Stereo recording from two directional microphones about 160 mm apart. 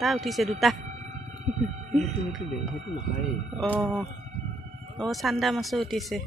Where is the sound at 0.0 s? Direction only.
Centre (ahead or behind).